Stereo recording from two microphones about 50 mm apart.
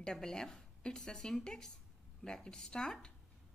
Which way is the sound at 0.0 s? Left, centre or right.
Centre.